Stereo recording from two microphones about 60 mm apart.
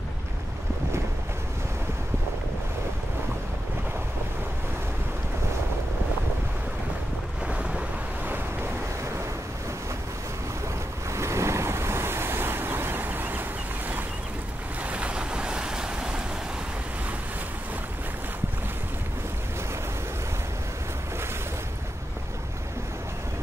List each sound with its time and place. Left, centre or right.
7.4 s waves: centre
11.1 s waves: right
14.8 s waves: right